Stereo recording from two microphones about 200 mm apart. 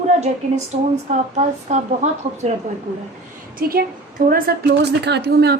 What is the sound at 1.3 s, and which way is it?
A woman's voice, 35° right (ahead or behind).